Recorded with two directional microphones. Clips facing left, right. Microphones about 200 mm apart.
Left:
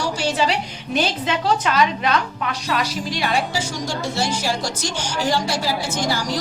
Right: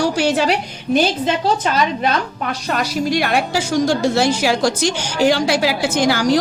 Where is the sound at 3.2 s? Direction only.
60° right (ahead or behind).